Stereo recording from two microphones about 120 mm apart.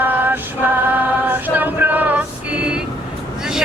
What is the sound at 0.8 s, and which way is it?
Choir, 15° right (ahead or behind).